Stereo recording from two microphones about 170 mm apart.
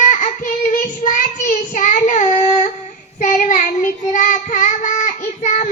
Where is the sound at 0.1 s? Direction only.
50° left (ahead or behind).